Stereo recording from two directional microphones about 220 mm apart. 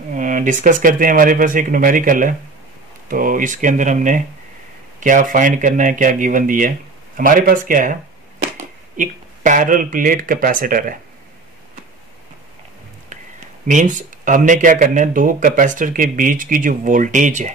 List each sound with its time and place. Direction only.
0.1 s speech: 35° right (ahead or behind)
13.7 s speech: 35° right (ahead or behind)